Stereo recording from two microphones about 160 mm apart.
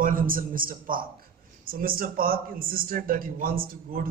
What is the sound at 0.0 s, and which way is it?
A man's voice, 60° right (ahead or behind).